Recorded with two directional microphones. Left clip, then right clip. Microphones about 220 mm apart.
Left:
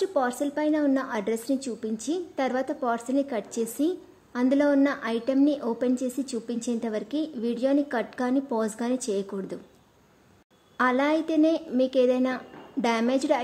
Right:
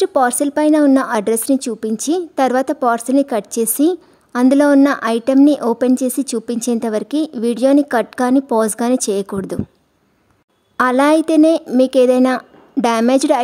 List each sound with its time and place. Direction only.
0.0 s a woman's voice: 50° right (ahead or behind)
10.8 s a woman's voice: 50° right (ahead or behind)